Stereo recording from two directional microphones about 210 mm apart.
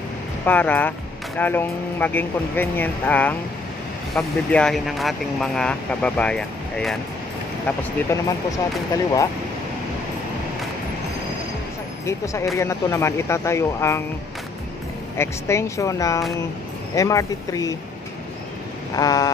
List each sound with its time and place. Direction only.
0.5 s speech: 5° left (ahead or behind)
7.6 s speech: 15° left (ahead or behind)
12.1 s speech: 15° left (ahead or behind)
15.1 s speech: 15° left (ahead or behind)
18.9 s speech: 15° left (ahead or behind)